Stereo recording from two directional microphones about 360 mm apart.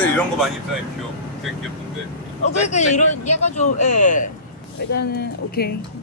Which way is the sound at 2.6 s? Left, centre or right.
Centre.